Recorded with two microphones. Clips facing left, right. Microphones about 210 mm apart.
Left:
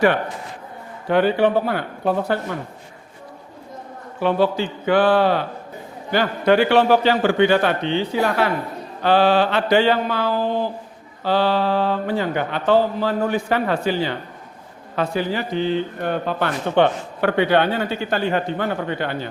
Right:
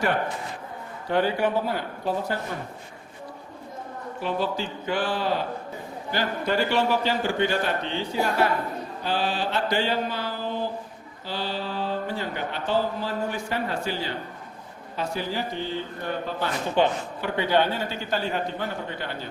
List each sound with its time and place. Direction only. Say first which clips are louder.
1.1 s speech: left 6 dB; 65° left (ahead or behind)
4.2 s speech: left 9 dB; 65° left (ahead or behind)
11.2 s speech: left 12 dB; 70° left (ahead or behind)